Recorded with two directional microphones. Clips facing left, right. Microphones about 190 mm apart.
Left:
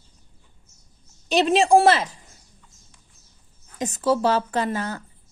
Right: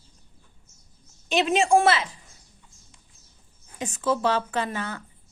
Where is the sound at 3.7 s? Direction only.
40° left (ahead or behind).